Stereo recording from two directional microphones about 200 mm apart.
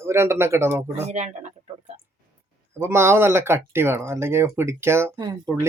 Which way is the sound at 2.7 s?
10° right (ahead or behind).